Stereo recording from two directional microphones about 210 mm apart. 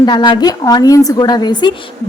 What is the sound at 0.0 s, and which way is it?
A woman's voice, 20° left (ahead or behind).